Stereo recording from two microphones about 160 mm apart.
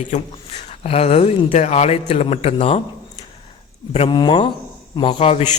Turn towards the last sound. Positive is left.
turn(degrees=40)  # may be behind; listen again after turning